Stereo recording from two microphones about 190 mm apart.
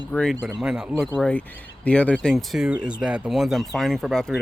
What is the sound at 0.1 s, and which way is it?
Speech, 5° left (ahead or behind).